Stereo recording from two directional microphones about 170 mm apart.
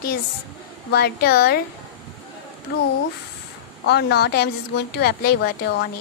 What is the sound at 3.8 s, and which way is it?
A woman's voice, 75° left (ahead or behind).